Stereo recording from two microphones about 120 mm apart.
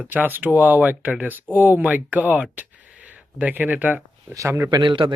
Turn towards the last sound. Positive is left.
turn(degrees=-40)  # may be behind; listen again after turning